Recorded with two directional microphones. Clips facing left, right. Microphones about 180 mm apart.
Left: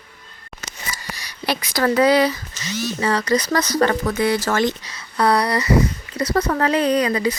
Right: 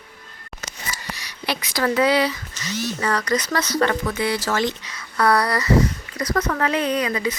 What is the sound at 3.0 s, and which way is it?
Speech, 30° left (ahead or behind).